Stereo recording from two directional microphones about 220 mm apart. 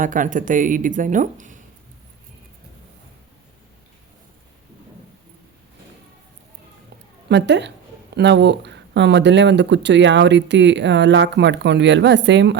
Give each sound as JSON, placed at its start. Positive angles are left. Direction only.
{"t": 0.0, "sound": "speech", "side_deg": -35}
{"t": 7.3, "sound": "a woman's voice", "side_deg": -50}